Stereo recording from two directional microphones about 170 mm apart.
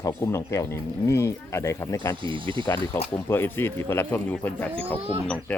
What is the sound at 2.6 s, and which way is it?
Speech, 25° left (ahead or behind).